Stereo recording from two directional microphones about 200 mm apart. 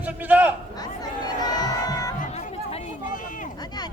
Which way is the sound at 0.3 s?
10° right (ahead or behind).